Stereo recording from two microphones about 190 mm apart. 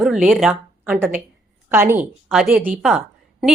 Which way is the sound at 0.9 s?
10° right (ahead or behind).